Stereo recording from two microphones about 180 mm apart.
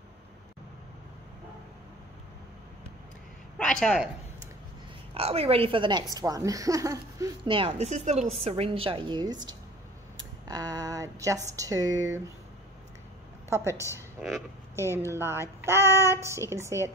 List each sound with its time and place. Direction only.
3.5 s a woman's voice: 5° left (ahead or behind)
5.1 s a woman's voice: 35° right (ahead or behind)
13.7 s a woman's voice: 15° left (ahead or behind)
14.8 s child singing: 15° right (ahead or behind)
15.6 s female singing: 15° right (ahead or behind)
16.1 s child singing: 15° right (ahead or behind)